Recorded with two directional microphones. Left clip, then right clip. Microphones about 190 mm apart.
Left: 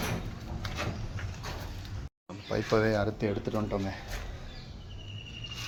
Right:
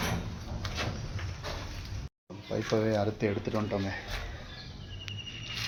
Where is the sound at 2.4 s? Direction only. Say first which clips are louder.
Left 2 dB; 10° left (ahead or behind).